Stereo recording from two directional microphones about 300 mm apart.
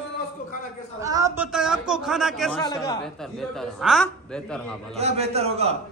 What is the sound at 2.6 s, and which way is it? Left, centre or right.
Speech, centre.